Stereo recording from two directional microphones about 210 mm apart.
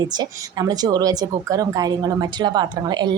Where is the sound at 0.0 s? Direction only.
20° right (ahead or behind).